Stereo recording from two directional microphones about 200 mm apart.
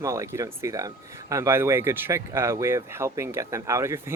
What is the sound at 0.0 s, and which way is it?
Speech, 15° right (ahead or behind).